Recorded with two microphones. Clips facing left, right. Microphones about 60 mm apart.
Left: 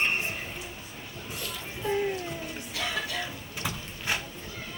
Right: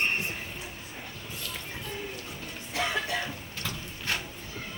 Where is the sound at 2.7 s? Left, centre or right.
Right.